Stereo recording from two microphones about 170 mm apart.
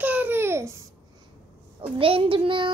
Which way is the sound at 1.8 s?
30° right (ahead or behind).